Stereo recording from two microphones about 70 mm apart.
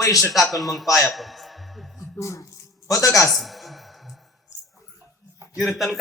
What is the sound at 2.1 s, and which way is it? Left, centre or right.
Speech, left.